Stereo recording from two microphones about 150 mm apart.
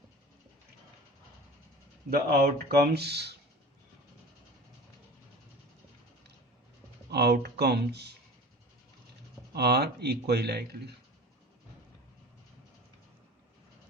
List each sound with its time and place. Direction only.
2.0 s speech: 85° right
7.1 s speech: 90° right
9.5 s speech: 90° right